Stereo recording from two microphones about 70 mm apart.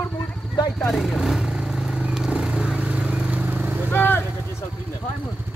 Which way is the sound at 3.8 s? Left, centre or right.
Left.